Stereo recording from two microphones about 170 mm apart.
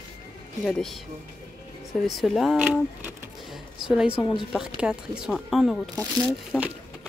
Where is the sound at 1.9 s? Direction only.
Centre (ahead or behind).